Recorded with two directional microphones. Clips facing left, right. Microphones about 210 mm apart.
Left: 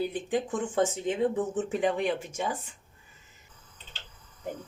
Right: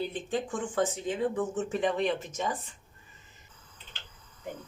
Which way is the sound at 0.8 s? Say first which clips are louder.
Left 3 dB; 25° left (ahead or behind).